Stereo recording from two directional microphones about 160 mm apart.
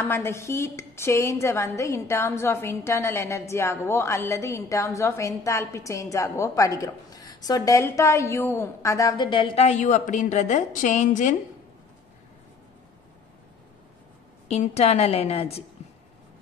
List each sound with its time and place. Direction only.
0.0 s a woman's voice: 15° left (ahead or behind); by 9.7 s 30° left (ahead or behind)
9.7 s a woman's voice: 50° left (ahead or behind)
14.5 s a woman's voice: 40° left (ahead or behind)